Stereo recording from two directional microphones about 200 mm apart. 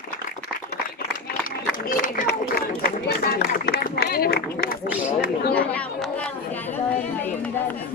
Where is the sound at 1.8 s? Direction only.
45° left (ahead or behind).